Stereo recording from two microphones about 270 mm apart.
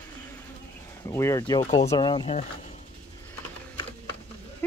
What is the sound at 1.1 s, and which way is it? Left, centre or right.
Speech, centre.